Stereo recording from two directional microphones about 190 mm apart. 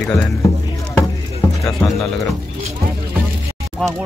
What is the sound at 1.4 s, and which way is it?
Music, 10° left (ahead or behind).